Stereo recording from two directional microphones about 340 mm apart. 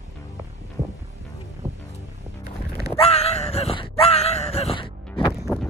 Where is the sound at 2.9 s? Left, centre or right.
Centre.